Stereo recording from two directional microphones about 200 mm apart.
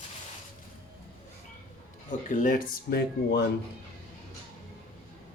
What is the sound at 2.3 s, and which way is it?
Speech, 40° left (ahead or behind).